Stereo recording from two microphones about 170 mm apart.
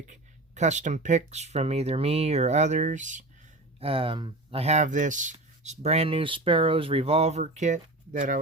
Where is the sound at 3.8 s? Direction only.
30° right (ahead or behind).